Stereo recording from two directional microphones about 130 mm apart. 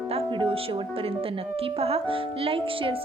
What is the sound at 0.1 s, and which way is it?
A woman's voice, 45° right (ahead or behind).